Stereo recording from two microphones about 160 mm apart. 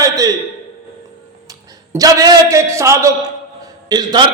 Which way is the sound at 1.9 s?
20° right (ahead or behind).